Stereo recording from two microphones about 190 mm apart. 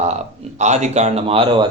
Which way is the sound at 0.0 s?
35° right (ahead or behind).